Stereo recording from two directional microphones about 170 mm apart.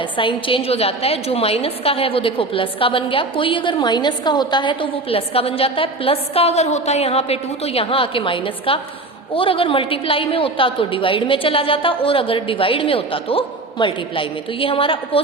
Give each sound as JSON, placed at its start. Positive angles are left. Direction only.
{"t": 0.0, "sound": "a woman's voice", "side_deg": 30}